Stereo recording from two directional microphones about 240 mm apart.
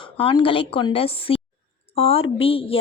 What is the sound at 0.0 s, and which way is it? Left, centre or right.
Speech, left.